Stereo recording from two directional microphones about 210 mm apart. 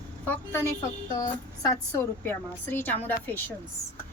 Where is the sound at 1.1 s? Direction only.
20° left (ahead or behind).